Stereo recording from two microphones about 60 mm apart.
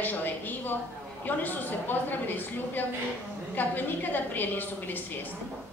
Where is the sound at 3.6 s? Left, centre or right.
Left.